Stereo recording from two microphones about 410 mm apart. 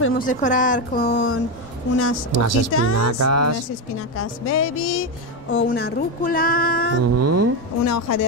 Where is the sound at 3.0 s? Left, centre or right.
Right.